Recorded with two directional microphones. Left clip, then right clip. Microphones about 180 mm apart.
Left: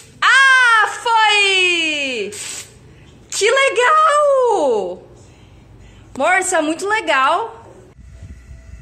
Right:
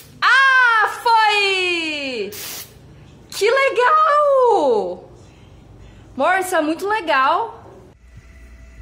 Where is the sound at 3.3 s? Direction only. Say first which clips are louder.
Left 2 dB; 5° left (ahead or behind).